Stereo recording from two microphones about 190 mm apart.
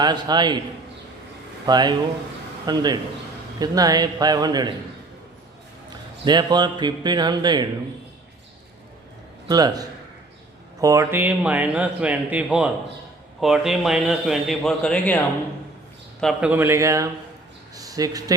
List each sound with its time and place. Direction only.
0.0 s speech: 20° right (ahead or behind)
1.6 s speech: 20° right (ahead or behind)
6.2 s speech: 20° right (ahead or behind)
9.5 s a man's voice: 20° right (ahead or behind); by 15.2 s 5° left (ahead or behind)
16.2 s speech: 5° right (ahead or behind)